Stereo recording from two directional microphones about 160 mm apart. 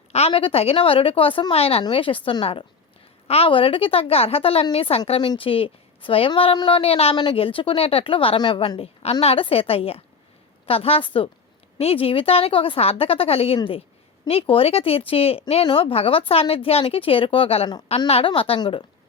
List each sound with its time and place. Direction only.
0.1 s a woman's voice: 40° left (ahead or behind)